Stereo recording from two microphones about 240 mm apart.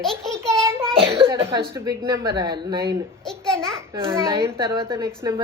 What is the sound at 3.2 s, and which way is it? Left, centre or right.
Babbling, centre.